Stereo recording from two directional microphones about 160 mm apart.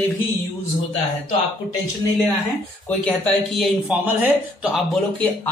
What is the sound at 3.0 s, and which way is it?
Speech, 5° left (ahead or behind).